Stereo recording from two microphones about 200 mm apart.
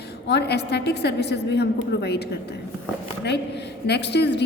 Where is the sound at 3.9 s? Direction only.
55° left (ahead or behind).